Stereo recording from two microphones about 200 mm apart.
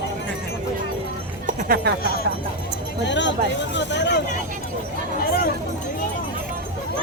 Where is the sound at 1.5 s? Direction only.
45° right (ahead or behind).